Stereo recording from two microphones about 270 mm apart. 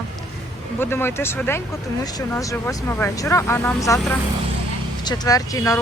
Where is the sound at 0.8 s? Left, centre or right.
Centre.